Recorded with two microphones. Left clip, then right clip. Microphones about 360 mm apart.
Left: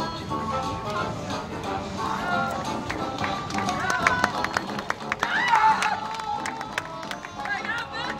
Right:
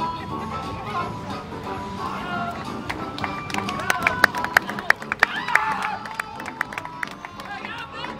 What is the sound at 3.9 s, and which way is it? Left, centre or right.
Music, right.